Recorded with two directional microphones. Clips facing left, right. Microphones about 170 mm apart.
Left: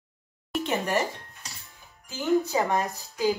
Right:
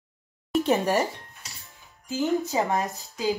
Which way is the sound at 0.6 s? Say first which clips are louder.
Right 3 dB; 35° right (ahead or behind).